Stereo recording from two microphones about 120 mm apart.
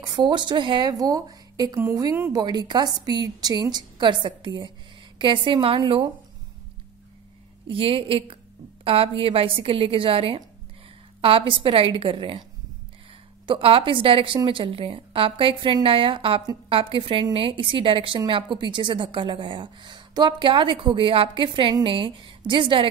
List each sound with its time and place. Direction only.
0.0 s a woman's voice: 40° right (ahead or behind)
2.3 s a woman's voice: 35° right (ahead or behind)
7.6 s a woman's voice: 50° right (ahead or behind)
13.5 s a woman's voice: 50° right (ahead or behind)